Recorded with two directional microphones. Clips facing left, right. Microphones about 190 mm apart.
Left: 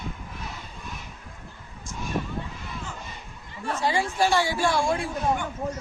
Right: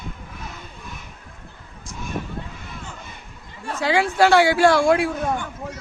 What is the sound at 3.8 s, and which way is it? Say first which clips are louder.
A woman's voice: right 6 dB; 80° right.